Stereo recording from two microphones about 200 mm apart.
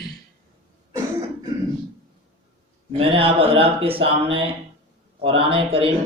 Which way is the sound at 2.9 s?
30° right (ahead or behind).